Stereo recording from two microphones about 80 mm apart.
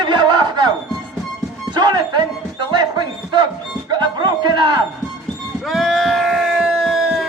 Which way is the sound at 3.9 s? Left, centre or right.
Right.